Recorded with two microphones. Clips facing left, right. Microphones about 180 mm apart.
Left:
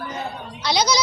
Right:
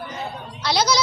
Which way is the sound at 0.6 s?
Centre (ahead or behind).